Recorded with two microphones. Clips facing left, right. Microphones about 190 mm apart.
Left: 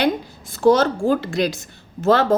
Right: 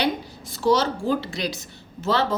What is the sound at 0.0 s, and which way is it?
A woman's voice, 50° left (ahead or behind).